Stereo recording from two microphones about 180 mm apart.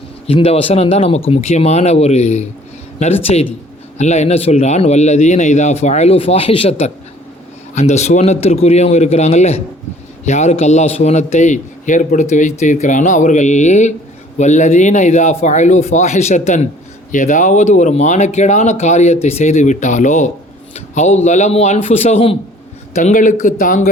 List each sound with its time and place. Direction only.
0.3 s a man's voice: 35° left (ahead or behind)